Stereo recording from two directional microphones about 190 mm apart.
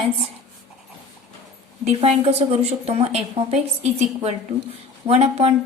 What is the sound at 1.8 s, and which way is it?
A woman's voice, 35° right (ahead or behind).